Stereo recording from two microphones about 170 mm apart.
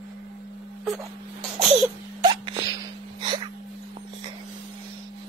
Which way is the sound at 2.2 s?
25° right (ahead or behind).